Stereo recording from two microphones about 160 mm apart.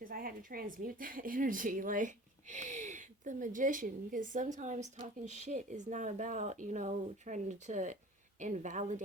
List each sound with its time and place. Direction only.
0.0 s a woman's voice: 65° right (ahead or behind)